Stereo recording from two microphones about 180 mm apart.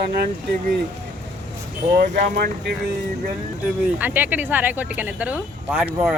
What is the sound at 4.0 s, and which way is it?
Speech, 10° right (ahead or behind).